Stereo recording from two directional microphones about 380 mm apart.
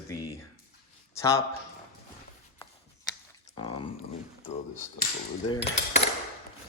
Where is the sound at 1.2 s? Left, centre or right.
Centre.